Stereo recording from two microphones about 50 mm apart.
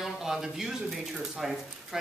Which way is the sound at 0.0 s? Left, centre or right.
Centre.